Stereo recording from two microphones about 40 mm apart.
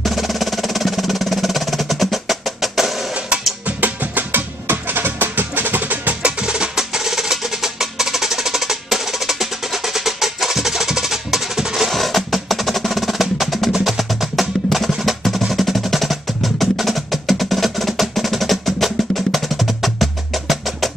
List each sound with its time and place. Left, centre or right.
0.0 s music: centre
3.6 s music: right
4.6 s music: right
6.2 s percussion: right
6.7 s music: centre
11.9 s music: centre